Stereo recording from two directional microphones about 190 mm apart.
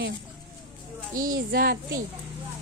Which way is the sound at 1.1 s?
45° right (ahead or behind).